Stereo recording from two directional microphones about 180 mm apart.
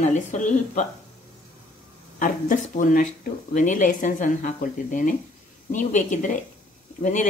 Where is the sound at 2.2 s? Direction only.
45° left (ahead or behind).